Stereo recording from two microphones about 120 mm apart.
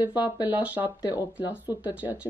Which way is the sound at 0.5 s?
15° right (ahead or behind).